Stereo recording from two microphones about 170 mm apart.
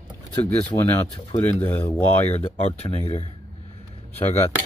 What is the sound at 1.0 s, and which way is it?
Speech, 35° left (ahead or behind).